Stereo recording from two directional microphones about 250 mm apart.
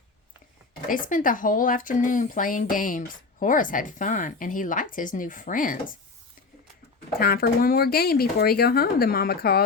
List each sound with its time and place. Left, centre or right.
0.9 s speech: left
7.2 s speech: left